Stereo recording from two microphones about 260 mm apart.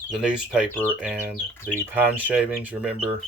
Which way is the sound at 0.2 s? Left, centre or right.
Centre.